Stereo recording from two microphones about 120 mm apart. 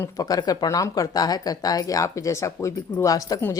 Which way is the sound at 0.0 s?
30° left (ahead or behind).